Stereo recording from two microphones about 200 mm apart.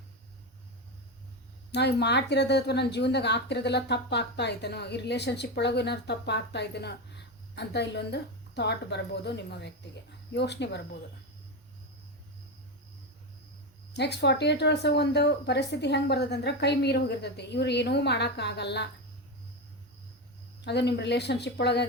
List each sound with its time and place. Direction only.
1.7 s speech: 55° left (ahead or behind)
13.9 s speech: 60° left (ahead or behind)
20.6 s speech: 55° left (ahead or behind)